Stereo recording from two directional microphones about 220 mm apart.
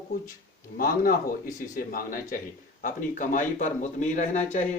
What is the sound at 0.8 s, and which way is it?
Speech, 40° left (ahead or behind).